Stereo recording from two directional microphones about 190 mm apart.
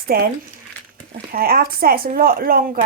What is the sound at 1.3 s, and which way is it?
Speech, 50° right (ahead or behind).